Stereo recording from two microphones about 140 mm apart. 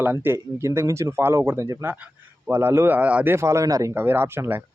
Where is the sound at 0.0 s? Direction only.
15° right (ahead or behind).